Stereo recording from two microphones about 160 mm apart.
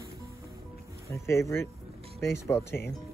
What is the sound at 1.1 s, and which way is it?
Speech, 15° left (ahead or behind).